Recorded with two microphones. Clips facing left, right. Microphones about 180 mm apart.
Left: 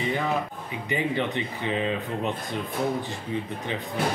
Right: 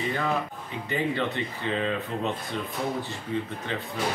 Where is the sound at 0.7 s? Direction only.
15° left (ahead or behind).